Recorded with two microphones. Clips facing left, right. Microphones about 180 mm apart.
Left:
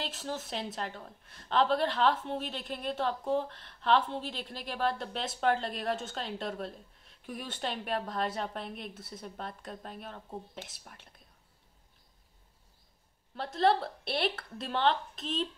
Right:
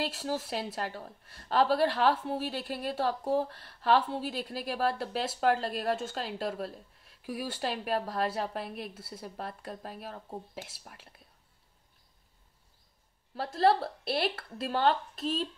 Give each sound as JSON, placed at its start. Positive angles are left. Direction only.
{"t": 0.2, "sound": "speech", "side_deg": -35}
{"t": 0.7, "sound": "speech", "side_deg": -5}
{"t": 13.4, "sound": "speech", "side_deg": -5}